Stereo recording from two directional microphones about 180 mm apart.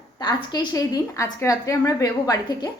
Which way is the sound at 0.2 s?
25° left (ahead or behind).